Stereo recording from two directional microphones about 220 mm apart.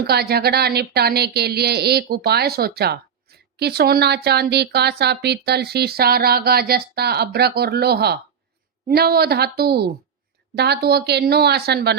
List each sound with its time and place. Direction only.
0.1 s a woman's voice: 45° right (ahead or behind)